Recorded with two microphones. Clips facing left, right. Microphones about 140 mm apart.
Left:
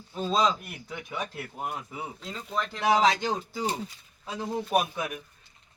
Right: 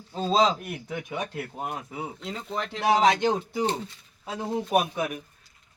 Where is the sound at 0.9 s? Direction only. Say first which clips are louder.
Right 3 dB; 50° right (ahead or behind).